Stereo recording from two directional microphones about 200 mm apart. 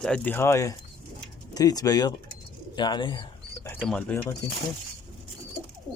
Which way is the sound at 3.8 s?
5° left (ahead or behind).